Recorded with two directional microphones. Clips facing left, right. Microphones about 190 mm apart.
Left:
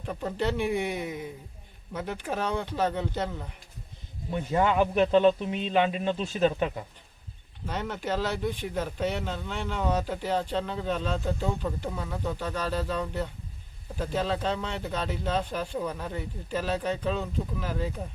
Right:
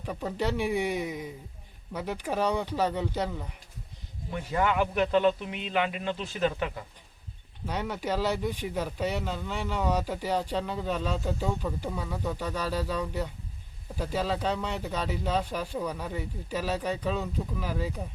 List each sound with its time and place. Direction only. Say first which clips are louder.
0.0 s speech: left 1 dB; 5° right (ahead or behind)
4.3 s a man's voice: left 3 dB; 20° left (ahead or behind)
7.7 s speech: even; 10° right (ahead or behind)